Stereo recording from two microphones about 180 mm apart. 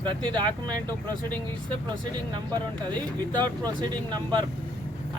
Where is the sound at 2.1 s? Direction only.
25° right (ahead or behind).